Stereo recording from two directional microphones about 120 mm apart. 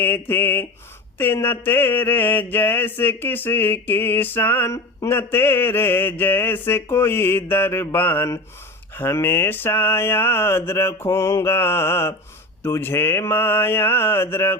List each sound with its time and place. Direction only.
0.0 s mantra: 15° left (ahead or behind)